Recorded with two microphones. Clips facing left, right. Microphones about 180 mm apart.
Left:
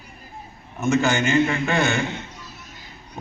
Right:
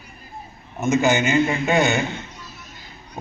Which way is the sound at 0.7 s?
20° right (ahead or behind).